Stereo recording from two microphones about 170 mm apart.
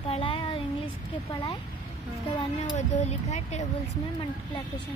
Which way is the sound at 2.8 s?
40° left (ahead or behind).